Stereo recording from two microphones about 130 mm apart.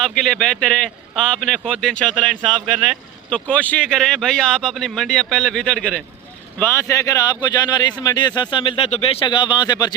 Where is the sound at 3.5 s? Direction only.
10° left (ahead or behind).